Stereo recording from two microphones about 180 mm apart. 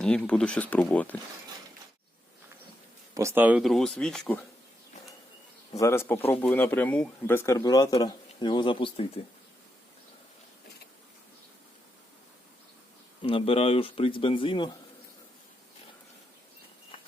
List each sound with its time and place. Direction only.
0.0 s speech: 5° left (ahead or behind)
3.2 s speech: 15° right (ahead or behind); by 4.4 s 5° left (ahead or behind)
5.8 s speech: 15° left (ahead or behind); by 9.2 s 30° left (ahead or behind)
13.2 s speech: 30° left (ahead or behind)